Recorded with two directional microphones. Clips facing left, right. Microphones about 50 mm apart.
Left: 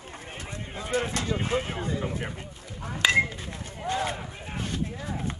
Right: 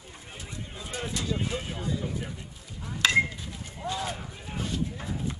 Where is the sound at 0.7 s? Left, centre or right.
Left.